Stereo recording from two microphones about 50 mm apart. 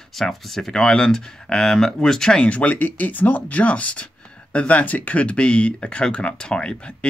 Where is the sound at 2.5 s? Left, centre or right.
Left.